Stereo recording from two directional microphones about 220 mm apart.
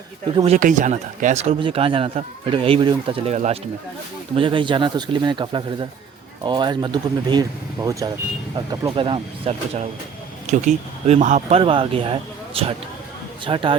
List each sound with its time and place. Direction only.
0.3 s speech: 30° right (ahead or behind)